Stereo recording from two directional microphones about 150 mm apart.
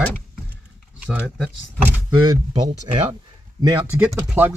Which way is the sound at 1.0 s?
5° right (ahead or behind).